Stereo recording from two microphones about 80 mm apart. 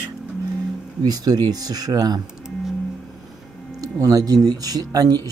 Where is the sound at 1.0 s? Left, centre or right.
Right.